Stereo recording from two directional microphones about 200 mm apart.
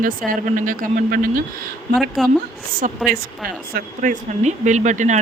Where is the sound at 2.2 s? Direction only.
Centre (ahead or behind).